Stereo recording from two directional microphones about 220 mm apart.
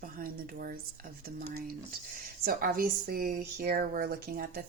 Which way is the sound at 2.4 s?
40° right (ahead or behind).